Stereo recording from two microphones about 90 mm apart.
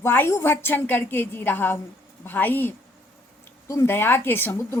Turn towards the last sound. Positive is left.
turn(degrees=25)  # may be behind; listen again after turning